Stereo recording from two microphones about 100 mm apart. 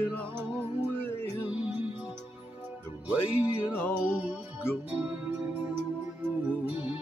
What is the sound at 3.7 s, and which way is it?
Music, 20° left (ahead or behind).